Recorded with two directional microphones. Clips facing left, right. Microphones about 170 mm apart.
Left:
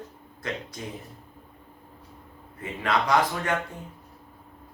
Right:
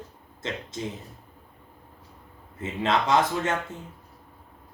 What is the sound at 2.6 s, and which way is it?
Speech, 25° right (ahead or behind).